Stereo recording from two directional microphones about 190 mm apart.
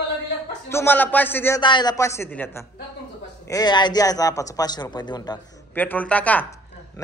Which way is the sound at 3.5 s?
25° left (ahead or behind).